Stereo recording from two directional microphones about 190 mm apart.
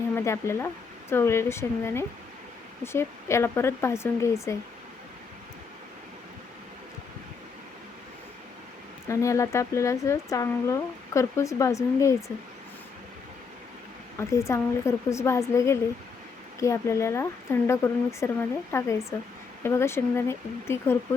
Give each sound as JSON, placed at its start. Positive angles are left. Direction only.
{"t": 0.2, "sound": "speech", "side_deg": 15}
{"t": 9.0, "sound": "speech", "side_deg": 15}
{"t": 14.2, "sound": "speech", "side_deg": 15}